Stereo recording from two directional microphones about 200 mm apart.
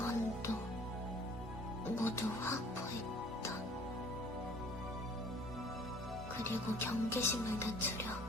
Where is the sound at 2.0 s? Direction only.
10° left (ahead or behind).